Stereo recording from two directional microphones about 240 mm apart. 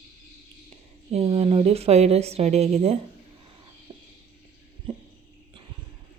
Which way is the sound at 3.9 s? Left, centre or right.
Centre.